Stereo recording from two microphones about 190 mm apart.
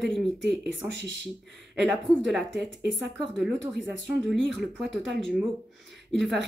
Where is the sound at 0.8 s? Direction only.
70° right (ahead or behind).